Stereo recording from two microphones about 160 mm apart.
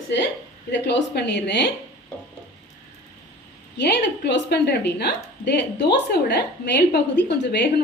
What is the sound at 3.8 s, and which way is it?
A woman's voice, 90° left.